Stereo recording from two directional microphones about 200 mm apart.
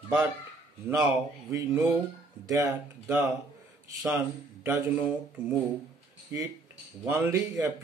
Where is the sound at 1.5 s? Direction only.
15° right (ahead or behind).